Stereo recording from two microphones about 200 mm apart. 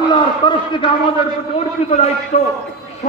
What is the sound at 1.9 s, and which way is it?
Speech, 30° left (ahead or behind).